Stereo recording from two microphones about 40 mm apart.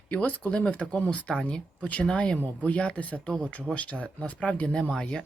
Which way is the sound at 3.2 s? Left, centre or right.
Left.